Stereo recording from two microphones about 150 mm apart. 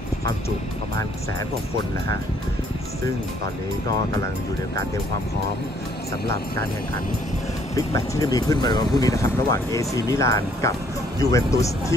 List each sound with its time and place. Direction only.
7.7 s speech: 20° left (ahead or behind)